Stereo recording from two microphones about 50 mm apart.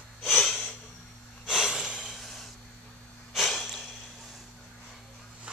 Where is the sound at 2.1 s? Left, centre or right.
Centre.